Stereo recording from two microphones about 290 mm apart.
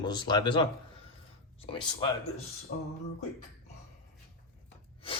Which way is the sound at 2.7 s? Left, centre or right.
Left.